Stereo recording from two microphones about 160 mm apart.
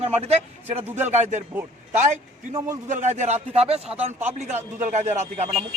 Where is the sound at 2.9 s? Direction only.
50° right (ahead or behind).